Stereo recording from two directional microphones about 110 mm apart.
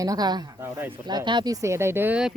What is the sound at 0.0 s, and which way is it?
Speech, 35° right (ahead or behind).